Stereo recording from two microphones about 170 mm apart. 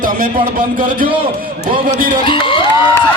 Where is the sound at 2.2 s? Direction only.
30° left (ahead or behind).